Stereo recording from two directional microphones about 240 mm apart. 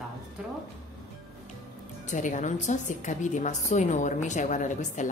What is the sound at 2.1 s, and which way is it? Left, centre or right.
A woman's voice, left.